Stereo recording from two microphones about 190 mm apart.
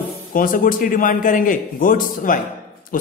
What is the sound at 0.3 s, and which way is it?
A man's voice, 45° left (ahead or behind).